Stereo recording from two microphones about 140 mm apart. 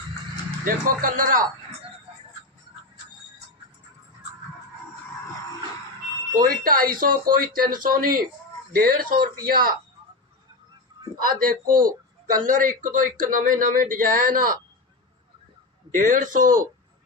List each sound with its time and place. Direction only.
0.6 s speech: 75° right (ahead or behind)
6.3 s speech: 85° right
11.2 s speech: 90° right
12.5 s speech: 70° right (ahead or behind)
15.9 s speech: 70° right (ahead or behind)